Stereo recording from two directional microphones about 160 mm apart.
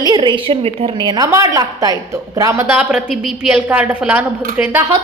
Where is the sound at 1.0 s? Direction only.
25° right (ahead or behind).